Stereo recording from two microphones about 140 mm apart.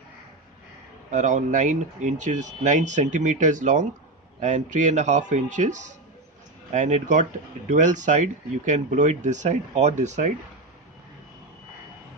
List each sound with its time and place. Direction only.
1.1 s speech: 60° right (ahead or behind)